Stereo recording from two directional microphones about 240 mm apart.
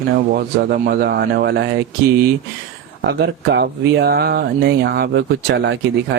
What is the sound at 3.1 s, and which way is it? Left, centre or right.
Speech, right.